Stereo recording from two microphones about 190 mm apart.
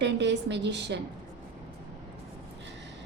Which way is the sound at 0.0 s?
65° right (ahead or behind).